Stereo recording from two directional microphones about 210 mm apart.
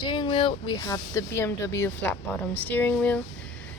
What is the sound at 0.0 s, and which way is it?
A woman's voice, 20° left (ahead or behind).